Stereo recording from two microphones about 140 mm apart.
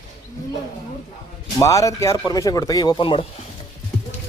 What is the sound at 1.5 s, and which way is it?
Speech, 25° left (ahead or behind).